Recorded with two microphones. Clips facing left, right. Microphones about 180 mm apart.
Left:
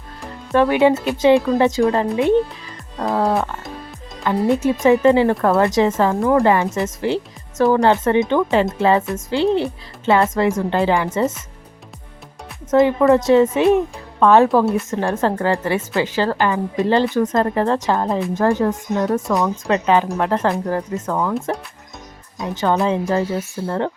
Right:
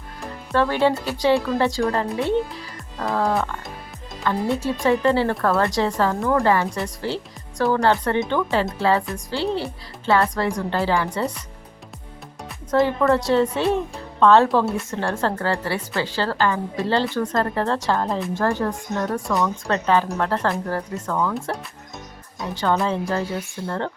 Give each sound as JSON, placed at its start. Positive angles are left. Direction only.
{"t": 0.5, "sound": "speech", "side_deg": 15}
{"t": 12.7, "sound": "speech", "side_deg": 15}
{"t": 14.6, "sound": "a woman's voice", "side_deg": 0}
{"t": 14.8, "sound": "speech", "side_deg": 20}
{"t": 22.6, "sound": "speech", "side_deg": 15}